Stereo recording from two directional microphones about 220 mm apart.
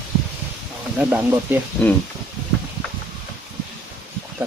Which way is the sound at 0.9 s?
10° right (ahead or behind).